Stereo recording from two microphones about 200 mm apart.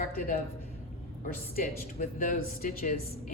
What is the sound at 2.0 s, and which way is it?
A woman's voice, 45° left (ahead or behind).